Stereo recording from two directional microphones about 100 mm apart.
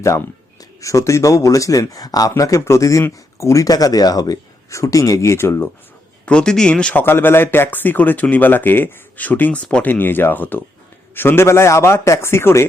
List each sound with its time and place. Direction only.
0.0 s speech: 30° left (ahead or behind)
6.2 s speech: 10° left (ahead or behind)
7.0 s speech: 20° left (ahead or behind)